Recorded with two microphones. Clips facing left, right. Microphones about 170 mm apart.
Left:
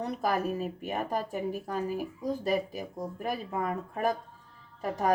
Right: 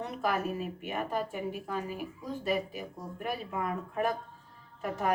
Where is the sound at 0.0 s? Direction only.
35° left (ahead or behind).